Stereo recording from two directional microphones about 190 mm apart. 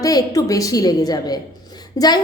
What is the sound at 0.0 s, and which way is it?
A woman's voice, 20° left (ahead or behind).